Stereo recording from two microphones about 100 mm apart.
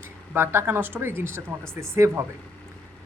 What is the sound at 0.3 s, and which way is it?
Speech, 25° right (ahead or behind).